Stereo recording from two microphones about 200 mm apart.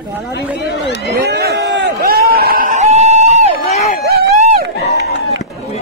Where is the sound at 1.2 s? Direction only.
55° right (ahead or behind); by 3.5 s 35° right (ahead or behind).